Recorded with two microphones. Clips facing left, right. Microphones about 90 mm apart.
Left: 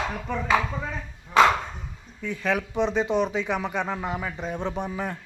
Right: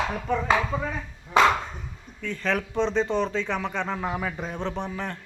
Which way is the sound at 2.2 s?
10° left (ahead or behind).